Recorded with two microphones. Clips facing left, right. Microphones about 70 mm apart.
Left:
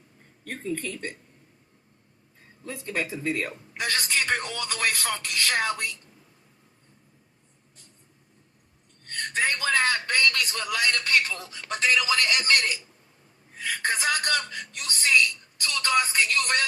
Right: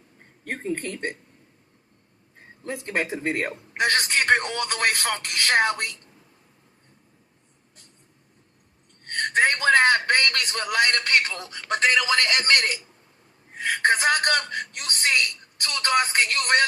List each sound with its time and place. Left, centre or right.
0.4 s speech: right
2.4 s a man's voice: right
9.0 s a man's voice: right